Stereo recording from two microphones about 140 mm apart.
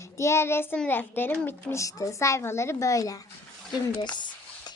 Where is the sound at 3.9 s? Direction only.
35° left (ahead or behind).